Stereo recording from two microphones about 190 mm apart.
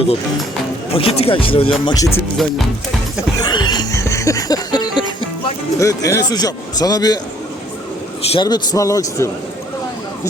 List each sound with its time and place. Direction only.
0.9 s a man's voice: 30° left (ahead or behind)
3.4 s music: 20° left (ahead or behind)
5.8 s a man's voice: 15° left (ahead or behind)
8.2 s a man's voice: 25° left (ahead or behind)